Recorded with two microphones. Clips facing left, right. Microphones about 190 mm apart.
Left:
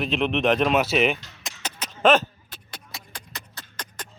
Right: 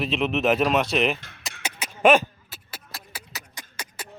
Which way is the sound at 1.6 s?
10° right (ahead or behind).